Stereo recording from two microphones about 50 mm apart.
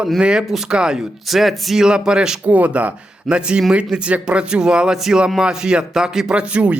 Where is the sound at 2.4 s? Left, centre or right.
Right.